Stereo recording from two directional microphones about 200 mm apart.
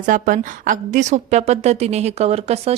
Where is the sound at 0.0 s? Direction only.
40° right (ahead or behind).